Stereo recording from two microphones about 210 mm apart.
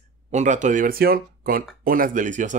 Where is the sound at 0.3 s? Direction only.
35° right (ahead or behind).